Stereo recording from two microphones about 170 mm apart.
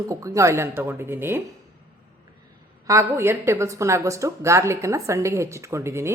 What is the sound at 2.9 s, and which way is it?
A woman's voice, 15° right (ahead or behind).